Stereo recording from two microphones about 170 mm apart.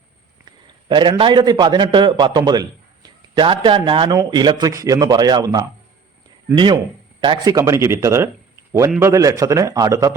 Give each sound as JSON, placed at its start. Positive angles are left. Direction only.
{"t": 0.9, "sound": "a man's voice", "side_deg": -30}